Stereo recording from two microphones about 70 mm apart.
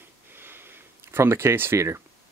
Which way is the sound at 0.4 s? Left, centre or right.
Right.